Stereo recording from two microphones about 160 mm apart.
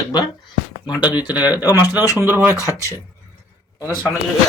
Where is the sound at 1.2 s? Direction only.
10° right (ahead or behind).